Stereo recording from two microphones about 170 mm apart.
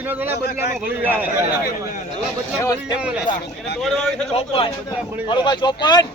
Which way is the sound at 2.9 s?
5° right (ahead or behind).